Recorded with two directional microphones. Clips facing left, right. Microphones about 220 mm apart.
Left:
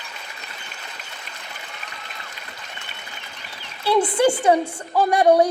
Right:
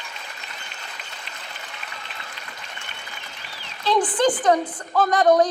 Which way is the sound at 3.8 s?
10° left (ahead or behind).